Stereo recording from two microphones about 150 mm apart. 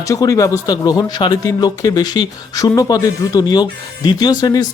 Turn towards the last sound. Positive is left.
turn(degrees=25)  # may be behind; listen again after turning